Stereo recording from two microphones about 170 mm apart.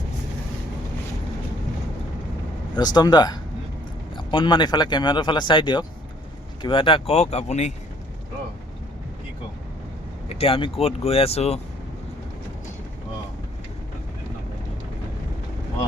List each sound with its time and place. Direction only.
2.7 s speech: 25° left (ahead or behind); by 7.7 s 40° left (ahead or behind)
10.2 s speech: 35° left (ahead or behind)